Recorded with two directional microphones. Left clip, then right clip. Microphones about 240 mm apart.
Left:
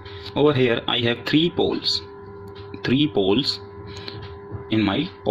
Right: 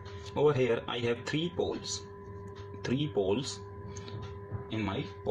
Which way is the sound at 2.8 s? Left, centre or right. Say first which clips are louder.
Left 11 dB; left.